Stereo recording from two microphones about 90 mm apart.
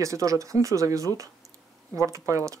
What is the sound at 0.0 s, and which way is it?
Speech, 35° right (ahead or behind).